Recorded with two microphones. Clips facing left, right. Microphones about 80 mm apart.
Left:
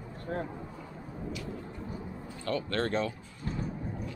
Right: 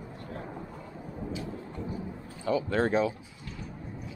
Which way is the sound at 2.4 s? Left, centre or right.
Centre.